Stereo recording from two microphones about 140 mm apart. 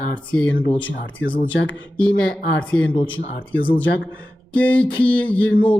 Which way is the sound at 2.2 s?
10° left (ahead or behind).